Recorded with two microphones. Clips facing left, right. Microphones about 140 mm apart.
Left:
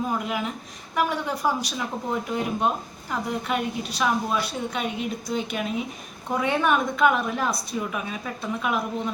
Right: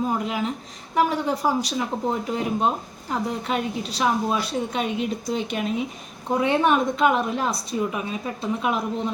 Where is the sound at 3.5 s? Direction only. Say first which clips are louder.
Right 1 dB; 35° right (ahead or behind).